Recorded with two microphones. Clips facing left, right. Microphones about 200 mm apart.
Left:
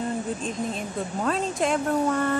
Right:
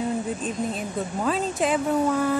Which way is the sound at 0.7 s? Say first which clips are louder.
Right 1 dB; centre (ahead or behind).